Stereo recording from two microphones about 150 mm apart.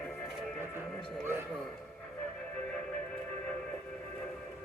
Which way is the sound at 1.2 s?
15° right (ahead or behind).